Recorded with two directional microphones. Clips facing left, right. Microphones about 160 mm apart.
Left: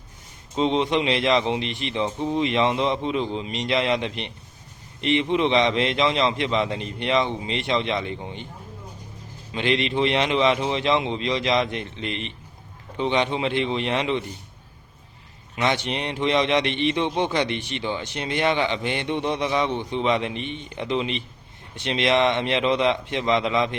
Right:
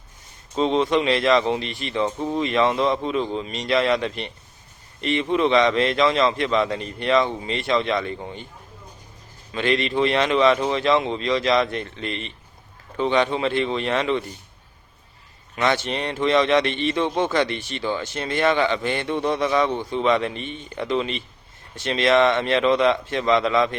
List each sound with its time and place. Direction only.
0.5 s a man's voice: 20° left (ahead or behind)
9.5 s a man's voice: 20° left (ahead or behind)
15.5 s a man's voice: 15° left (ahead or behind)